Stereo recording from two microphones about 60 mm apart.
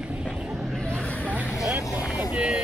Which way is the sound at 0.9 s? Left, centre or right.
Left.